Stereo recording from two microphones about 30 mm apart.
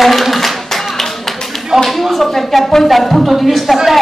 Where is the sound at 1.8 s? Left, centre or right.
Centre.